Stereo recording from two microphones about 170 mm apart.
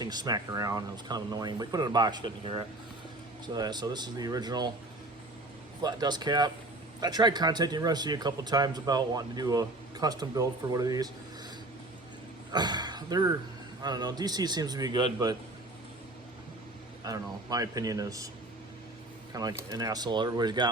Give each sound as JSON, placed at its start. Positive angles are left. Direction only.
{"t": 0.0, "sound": "speech", "side_deg": -25}
{"t": 5.8, "sound": "speech", "side_deg": -25}
{"t": 12.5, "sound": "speech", "side_deg": -25}
{"t": 17.0, "sound": "speech", "side_deg": -20}
{"t": 19.3, "sound": "speech", "side_deg": -20}